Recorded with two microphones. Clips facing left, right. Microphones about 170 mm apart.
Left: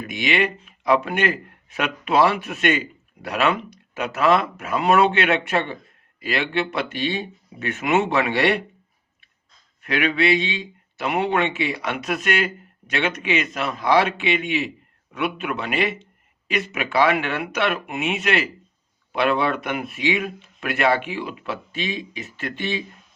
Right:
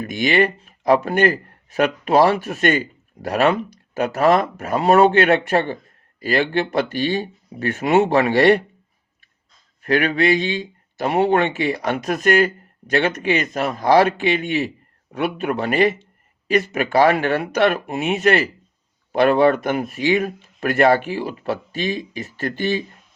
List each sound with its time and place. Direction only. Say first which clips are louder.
0.0 s a man's voice: right 5 dB; 40° right (ahead or behind)
9.8 s speech: right 3 dB; 40° right (ahead or behind)